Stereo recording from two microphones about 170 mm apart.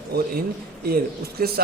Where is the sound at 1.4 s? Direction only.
60° right (ahead or behind).